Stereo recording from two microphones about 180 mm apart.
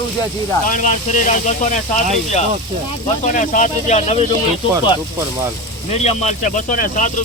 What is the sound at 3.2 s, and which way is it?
Speech, 45° left (ahead or behind).